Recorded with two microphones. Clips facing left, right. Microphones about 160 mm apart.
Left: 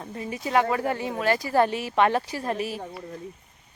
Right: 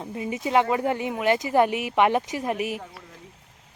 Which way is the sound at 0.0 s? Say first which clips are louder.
Right 3 dB; 20° right (ahead or behind).